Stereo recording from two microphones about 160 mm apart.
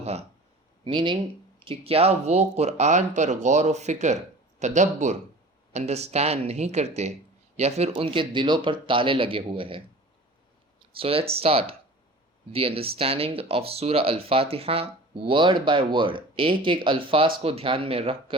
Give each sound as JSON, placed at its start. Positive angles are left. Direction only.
{"t": 0.0, "sound": "speech", "side_deg": -40}
{"t": 0.9, "sound": "speech", "side_deg": -30}
{"t": 10.9, "sound": "speech", "side_deg": -35}